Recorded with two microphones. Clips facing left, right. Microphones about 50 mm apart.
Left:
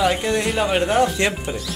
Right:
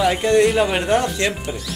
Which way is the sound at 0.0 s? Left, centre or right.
Centre.